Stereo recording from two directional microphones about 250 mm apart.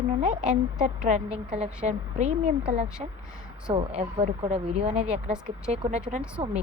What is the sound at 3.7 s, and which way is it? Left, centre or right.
Speech, right.